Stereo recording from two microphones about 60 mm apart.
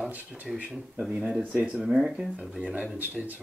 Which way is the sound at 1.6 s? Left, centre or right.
Centre.